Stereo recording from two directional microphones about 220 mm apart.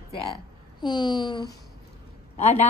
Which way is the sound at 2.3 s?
30° left (ahead or behind).